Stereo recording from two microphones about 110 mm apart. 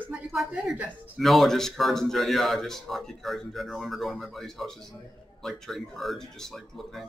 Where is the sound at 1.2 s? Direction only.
Centre (ahead or behind).